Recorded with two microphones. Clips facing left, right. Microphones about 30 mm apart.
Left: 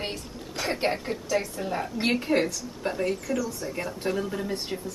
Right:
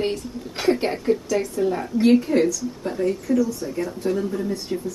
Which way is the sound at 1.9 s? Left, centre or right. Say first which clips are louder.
Right 8 dB; left.